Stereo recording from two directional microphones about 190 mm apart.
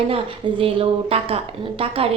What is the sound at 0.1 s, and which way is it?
A woman's voice, 25° right (ahead or behind).